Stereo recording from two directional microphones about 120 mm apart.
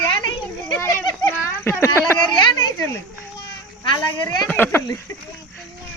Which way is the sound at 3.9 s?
35° left (ahead or behind).